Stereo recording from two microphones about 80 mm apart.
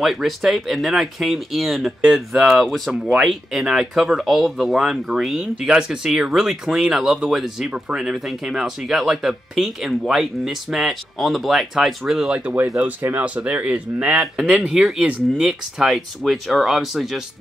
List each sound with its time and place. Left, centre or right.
0.0 s speech: centre
2.9 s speech: centre